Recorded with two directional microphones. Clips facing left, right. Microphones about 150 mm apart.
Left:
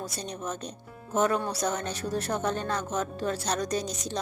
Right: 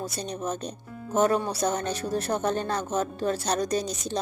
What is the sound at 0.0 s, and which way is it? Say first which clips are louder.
Speech: right 4 dB; 30° right (ahead or behind).